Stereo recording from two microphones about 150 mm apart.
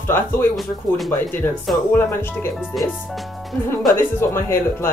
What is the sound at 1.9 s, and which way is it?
Speech, 15° left (ahead or behind).